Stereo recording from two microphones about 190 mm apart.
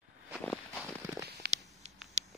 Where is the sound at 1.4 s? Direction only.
60° right (ahead or behind).